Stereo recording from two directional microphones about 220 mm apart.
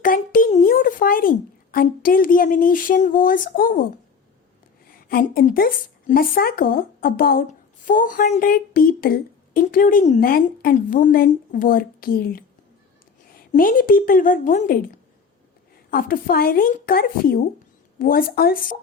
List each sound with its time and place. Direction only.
0.0 s a child's voice: 40° left (ahead or behind)
4.9 s a woman's voice: 40° left (ahead or behind)
13.5 s a woman's voice: 40° left (ahead or behind)
15.9 s a woman's voice: 40° left (ahead or behind)